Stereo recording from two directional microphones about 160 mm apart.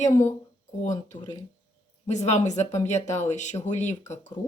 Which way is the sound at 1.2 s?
25° left (ahead or behind).